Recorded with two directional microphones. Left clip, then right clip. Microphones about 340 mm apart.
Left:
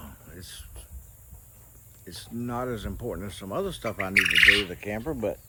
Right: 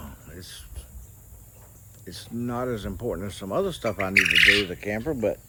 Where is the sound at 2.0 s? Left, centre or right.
Centre.